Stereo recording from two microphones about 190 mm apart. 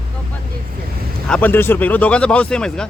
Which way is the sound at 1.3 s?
10° left (ahead or behind).